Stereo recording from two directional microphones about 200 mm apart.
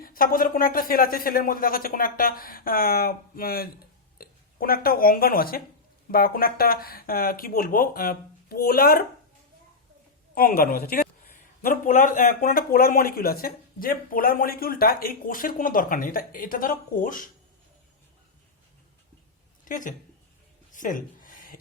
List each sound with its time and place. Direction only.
0.0 s speech: 45° left (ahead or behind)
10.3 s speech: 50° left (ahead or behind)
19.6 s a woman's voice: 40° left (ahead or behind)
20.7 s a sound: 40° left (ahead or behind)